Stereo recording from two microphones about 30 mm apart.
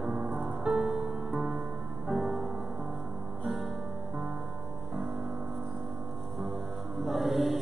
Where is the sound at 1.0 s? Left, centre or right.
Centre.